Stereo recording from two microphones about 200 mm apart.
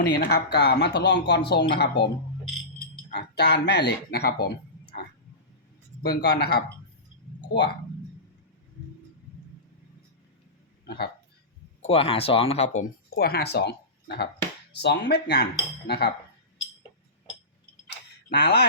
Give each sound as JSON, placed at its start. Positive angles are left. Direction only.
{"t": 0.0, "sound": "speech", "side_deg": 55}
{"t": 3.1, "sound": "speech", "side_deg": 55}
{"t": 10.8, "sound": "speech", "side_deg": 50}
{"t": 11.8, "sound": "speech", "side_deg": 30}
{"t": 13.1, "sound": "speech", "side_deg": 50}
{"t": 18.3, "sound": "speech", "side_deg": 55}